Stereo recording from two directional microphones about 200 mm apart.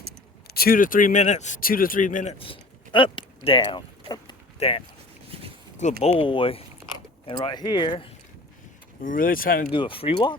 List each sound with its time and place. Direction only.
0.4 s speech: 50° left (ahead or behind)
2.4 s a sound: 25° left (ahead or behind)
5.3 s a sound: 30° right (ahead or behind)
6.0 s speech: 30° left (ahead or behind)
9.0 s speech: 45° left (ahead or behind)
9.7 s speech: 25° left (ahead or behind)